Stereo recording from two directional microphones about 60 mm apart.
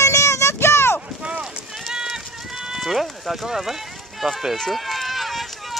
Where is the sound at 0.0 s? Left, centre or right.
Left.